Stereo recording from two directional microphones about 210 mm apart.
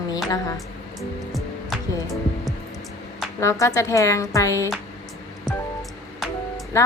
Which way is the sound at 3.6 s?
15° left (ahead or behind).